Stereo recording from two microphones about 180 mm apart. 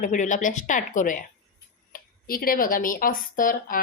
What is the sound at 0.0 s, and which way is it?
Speech, 45° left (ahead or behind).